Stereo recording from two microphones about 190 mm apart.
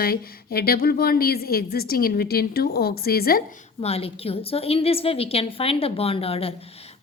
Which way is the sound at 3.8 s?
30° left (ahead or behind).